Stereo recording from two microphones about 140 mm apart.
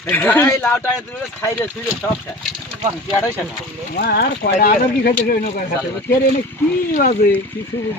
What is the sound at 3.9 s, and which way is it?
Speech, 90° left.